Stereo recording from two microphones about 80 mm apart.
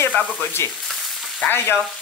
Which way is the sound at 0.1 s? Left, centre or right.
Left.